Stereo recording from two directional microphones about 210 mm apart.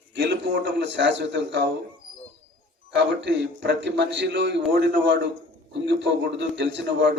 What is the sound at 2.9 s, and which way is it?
A man's voice, 55° right (ahead or behind).